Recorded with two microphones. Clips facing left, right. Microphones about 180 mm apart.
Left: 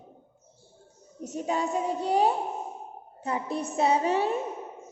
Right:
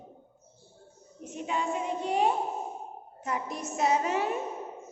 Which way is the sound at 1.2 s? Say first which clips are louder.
Left 3 dB; 40° left (ahead or behind).